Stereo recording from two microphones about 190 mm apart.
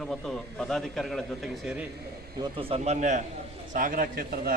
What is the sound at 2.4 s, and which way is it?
A man's voice, 30° right (ahead or behind).